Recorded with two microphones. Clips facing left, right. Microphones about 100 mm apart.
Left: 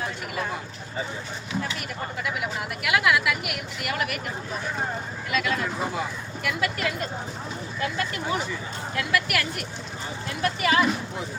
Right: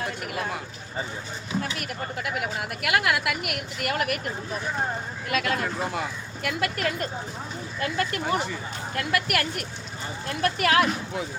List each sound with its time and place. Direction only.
1.8 s speech: 50° right (ahead or behind)
5.3 s speech: 50° right (ahead or behind)
10.4 s speech: 60° right (ahead or behind)